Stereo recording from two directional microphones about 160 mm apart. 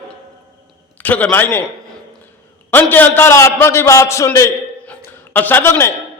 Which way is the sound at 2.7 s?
10° left (ahead or behind).